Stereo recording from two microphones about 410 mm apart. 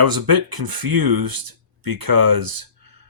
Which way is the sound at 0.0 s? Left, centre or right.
Right.